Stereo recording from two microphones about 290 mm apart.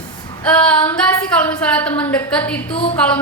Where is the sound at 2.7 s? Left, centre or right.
Centre.